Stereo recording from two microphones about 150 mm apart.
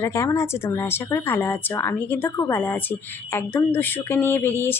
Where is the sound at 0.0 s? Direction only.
20° left (ahead or behind).